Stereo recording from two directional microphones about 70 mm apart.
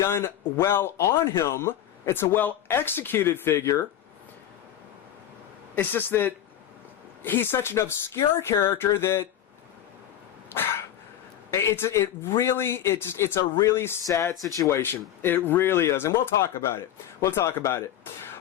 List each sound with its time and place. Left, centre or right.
0.0 s speech: left
5.7 s speech: left
10.5 s cough: left
11.5 s speech: left
14.4 s speech: left
14.7 s speech: left
17.2 s speech: left